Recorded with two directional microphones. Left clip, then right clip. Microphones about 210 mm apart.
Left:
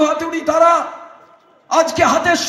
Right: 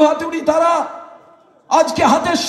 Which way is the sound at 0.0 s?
40° right (ahead or behind).